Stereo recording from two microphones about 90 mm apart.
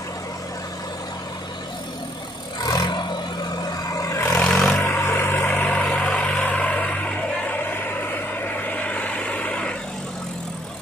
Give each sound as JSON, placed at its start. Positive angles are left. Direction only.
{"t": 2.6, "sound": "vehicle", "side_deg": 45}
{"t": 4.1, "sound": "vehicle", "side_deg": 30}
{"t": 4.4, "sound": "vehicle", "side_deg": 10}
{"t": 4.7, "sound": "vehicle", "side_deg": 20}
{"t": 8.6, "sound": "vehicle", "side_deg": 15}